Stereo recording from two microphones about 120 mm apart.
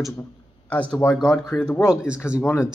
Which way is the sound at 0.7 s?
10° left (ahead or behind).